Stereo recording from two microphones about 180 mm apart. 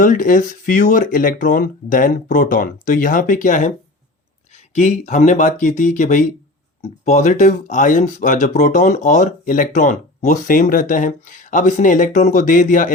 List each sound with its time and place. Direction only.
0.0 s speech: 50° left (ahead or behind)
4.7 s speech: 45° left (ahead or behind)